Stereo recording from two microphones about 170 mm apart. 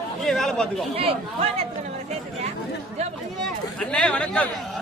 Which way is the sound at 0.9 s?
35° right (ahead or behind).